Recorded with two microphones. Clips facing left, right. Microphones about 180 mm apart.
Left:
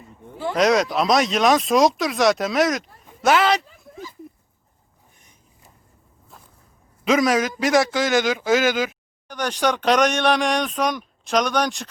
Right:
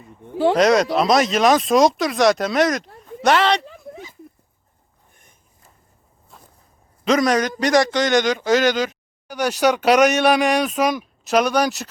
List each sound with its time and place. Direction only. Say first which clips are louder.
0.5 s speech: right 1 dB; centre (ahead or behind)
3.7 s a sound: right 2 dB; 70° right (ahead or behind)
6.3 s walk: right 1 dB; centre (ahead or behind)
7.0 s speech: right 1 dB; 5° left (ahead or behind)
9.2 s speech: right 4 dB; 10° right (ahead or behind)